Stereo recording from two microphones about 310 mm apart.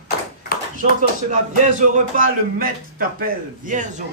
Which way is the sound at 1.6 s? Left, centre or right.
Right.